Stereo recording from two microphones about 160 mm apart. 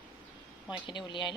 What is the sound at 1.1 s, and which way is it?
Speech, 30° left (ahead or behind).